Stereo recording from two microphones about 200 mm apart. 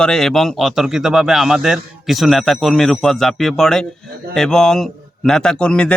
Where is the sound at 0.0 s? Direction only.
Centre (ahead or behind).